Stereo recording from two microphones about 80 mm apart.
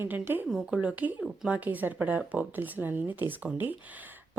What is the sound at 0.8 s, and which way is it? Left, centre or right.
Speech, centre.